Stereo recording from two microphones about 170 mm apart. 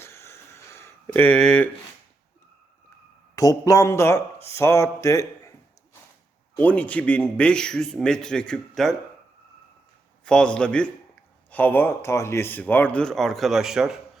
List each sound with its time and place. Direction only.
0.0 s a sound: 15° left (ahead or behind)
3.3 s speech: 20° left (ahead or behind)
6.6 s a man's voice: 10° left (ahead or behind)
10.2 s a man's voice: 5° left (ahead or behind)